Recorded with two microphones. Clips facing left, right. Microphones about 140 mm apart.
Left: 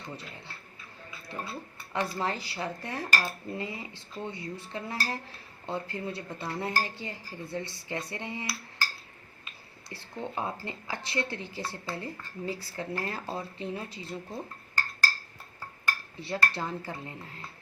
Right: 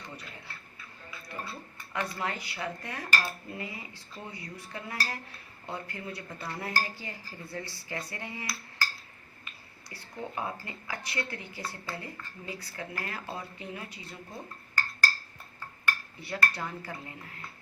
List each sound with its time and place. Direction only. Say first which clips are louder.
1.3 s a woman's voice: left 3 dB; 30° left (ahead or behind)
9.9 s a woman's voice: left 2 dB; 25° left (ahead or behind)
16.2 s a woman's voice: left 2 dB; 25° left (ahead or behind)